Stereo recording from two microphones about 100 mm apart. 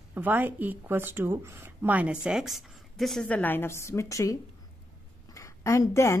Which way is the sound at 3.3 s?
15° left (ahead or behind).